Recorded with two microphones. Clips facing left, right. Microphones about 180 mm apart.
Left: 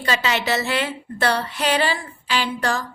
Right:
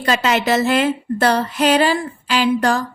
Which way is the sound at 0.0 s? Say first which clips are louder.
Right 5 dB; 45° right (ahead or behind).